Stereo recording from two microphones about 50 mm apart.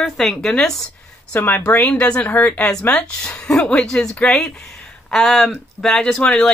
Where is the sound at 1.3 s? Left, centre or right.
Left.